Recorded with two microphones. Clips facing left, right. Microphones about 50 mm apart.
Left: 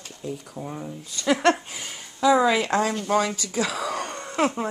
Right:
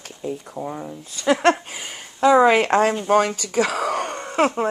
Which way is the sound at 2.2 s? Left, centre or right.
Right.